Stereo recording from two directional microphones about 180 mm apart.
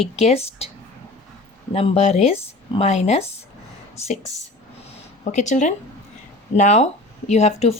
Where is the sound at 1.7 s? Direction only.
35° left (ahead or behind).